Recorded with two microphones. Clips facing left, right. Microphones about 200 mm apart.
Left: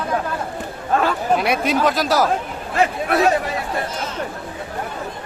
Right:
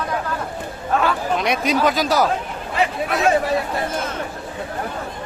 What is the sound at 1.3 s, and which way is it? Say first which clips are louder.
Speech: even; 5° left (ahead or behind).